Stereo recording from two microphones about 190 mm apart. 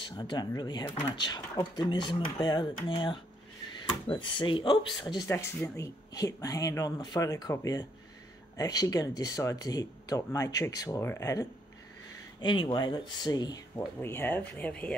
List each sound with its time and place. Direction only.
0.0 s speech: 25° left (ahead or behind); by 15.0 s 5° left (ahead or behind)